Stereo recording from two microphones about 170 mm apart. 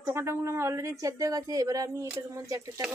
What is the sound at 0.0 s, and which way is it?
Speech, 15° right (ahead or behind).